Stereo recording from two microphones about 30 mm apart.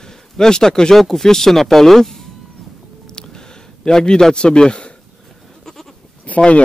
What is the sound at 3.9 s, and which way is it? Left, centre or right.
A man's voice, left.